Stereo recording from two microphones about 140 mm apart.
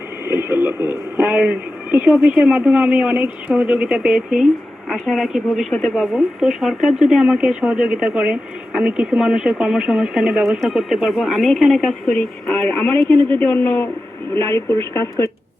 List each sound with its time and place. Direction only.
0.3 s speech: 15° right (ahead or behind); by 15.3 s 20° left (ahead or behind)